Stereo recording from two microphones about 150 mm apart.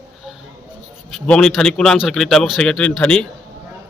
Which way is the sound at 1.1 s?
5° left (ahead or behind).